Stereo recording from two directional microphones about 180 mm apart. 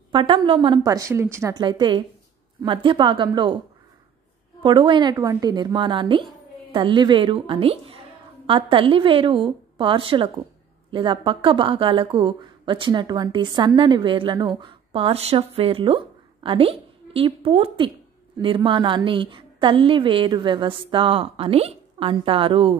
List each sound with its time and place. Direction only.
0.1 s speech: 30° right (ahead or behind)
4.6 s speech: 25° right (ahead or behind)